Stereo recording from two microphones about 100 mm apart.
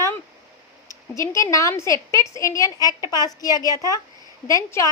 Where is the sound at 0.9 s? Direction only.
30° left (ahead or behind).